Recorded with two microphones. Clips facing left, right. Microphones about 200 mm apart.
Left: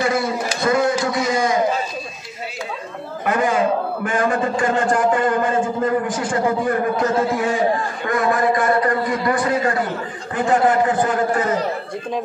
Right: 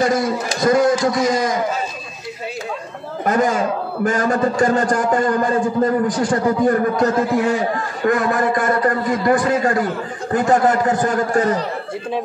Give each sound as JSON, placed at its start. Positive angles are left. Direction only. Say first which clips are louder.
{"t": 0.0, "sound": "a man's voice", "louder": "right 2 dB", "side_deg": -40}
{"t": 3.3, "sound": "a man's voice", "louder": "right 1 dB", "side_deg": -40}